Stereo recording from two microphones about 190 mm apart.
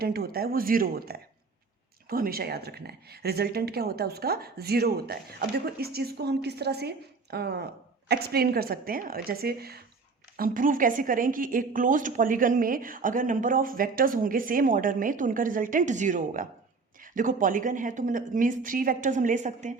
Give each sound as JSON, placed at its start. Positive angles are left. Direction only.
{"t": 0.0, "sound": "a woman's voice", "side_deg": -55}